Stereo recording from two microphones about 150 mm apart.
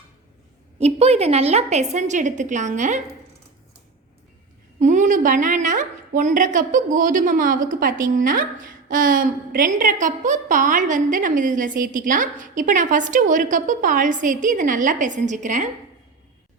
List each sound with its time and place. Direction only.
0.8 s a woman's voice: 45° right (ahead or behind)
4.8 s a woman's voice: 55° right (ahead or behind)